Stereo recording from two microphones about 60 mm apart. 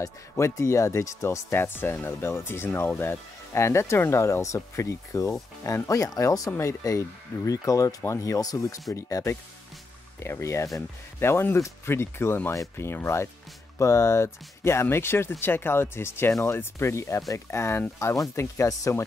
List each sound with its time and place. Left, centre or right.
0.0 s speech: left
6.5 s speech: left
7.4 s speech: left
8.9 s speech: left
11.1 s speech: left
13.7 s speech: left